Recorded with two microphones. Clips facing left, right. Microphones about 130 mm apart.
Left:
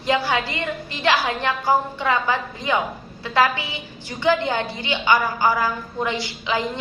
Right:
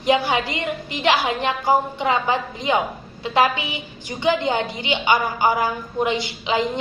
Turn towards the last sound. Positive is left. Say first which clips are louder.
# right 2 dB
turn(degrees=-20)  # may be behind; listen again after turning